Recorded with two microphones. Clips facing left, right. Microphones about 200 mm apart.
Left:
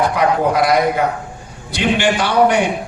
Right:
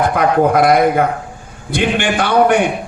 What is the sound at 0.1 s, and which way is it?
A man's voice, 55° right (ahead or behind).